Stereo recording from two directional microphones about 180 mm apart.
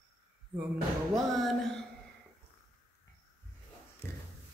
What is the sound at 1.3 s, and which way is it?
Speech, centre (ahead or behind).